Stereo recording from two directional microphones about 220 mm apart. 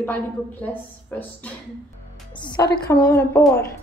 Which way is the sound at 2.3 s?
20° left (ahead or behind).